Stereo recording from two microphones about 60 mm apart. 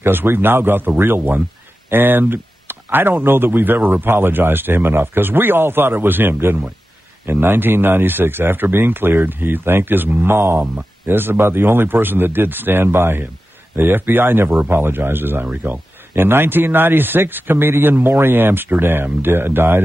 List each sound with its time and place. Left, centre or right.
0.0 s speech: right